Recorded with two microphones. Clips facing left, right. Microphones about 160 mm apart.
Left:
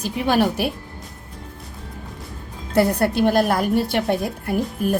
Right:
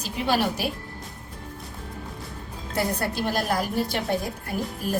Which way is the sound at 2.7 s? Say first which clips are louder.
Left 9 dB; 65° left (ahead or behind).